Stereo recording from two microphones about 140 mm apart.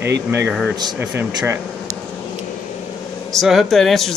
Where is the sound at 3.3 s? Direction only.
Centre (ahead or behind).